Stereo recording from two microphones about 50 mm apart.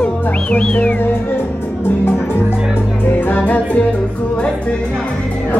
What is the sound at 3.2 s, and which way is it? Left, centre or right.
Music, left.